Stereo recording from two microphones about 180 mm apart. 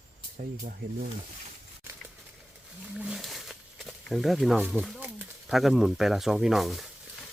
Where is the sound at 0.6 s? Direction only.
50° right (ahead or behind).